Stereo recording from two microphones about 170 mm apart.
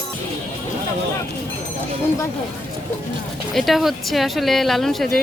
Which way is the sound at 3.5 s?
Centre (ahead or behind).